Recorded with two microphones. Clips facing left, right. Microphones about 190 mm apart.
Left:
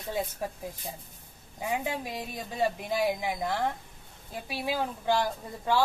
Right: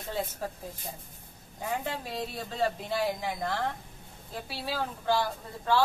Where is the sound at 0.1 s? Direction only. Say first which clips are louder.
Left 2 dB; 15° left (ahead or behind).